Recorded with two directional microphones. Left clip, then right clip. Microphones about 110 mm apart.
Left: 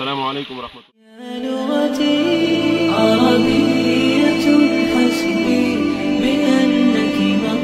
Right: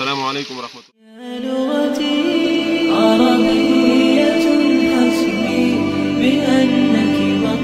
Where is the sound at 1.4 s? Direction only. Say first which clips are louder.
Right 1 dB; centre (ahead or behind).